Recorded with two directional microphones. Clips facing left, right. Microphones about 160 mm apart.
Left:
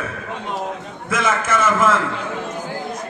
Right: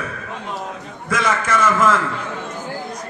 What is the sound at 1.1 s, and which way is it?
Speech, 5° left (ahead or behind).